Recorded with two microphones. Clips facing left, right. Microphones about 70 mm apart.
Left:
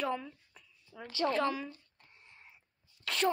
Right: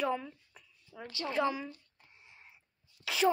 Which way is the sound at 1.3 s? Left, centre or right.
Centre.